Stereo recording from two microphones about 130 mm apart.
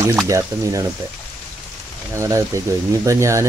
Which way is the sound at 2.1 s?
25° right (ahead or behind).